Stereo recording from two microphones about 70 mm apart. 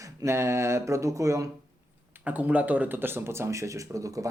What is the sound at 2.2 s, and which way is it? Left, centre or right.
Speech, right.